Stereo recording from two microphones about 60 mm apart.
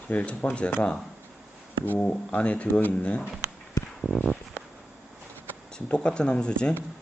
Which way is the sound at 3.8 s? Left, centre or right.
Left.